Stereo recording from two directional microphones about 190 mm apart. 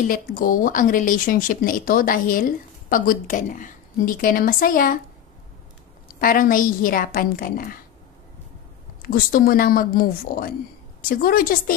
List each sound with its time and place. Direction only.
0.1 s a woman's voice: 50° left (ahead or behind)
6.1 s a woman's voice: 45° left (ahead or behind)
9.0 s a woman's voice: 50° left (ahead or behind)